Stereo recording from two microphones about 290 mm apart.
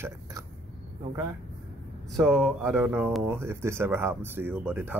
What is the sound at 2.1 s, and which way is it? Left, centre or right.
Speech, centre.